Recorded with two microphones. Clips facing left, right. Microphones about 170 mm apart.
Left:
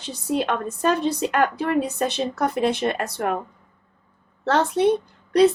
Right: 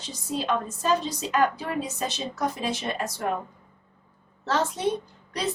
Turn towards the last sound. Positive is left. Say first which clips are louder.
# left 15 dB
turn(degrees=60)  # may be behind; listen again after turning